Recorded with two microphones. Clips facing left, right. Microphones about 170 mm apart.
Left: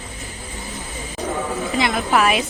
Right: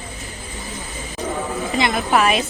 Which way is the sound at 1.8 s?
Centre (ahead or behind).